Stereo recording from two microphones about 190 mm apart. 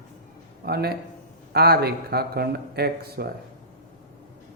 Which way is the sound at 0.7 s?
55° right (ahead or behind).